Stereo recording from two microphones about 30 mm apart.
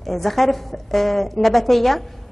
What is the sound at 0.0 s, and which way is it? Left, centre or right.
A woman's voice, centre.